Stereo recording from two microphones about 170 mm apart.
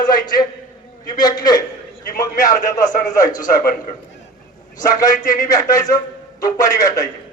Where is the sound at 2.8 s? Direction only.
50° left (ahead or behind).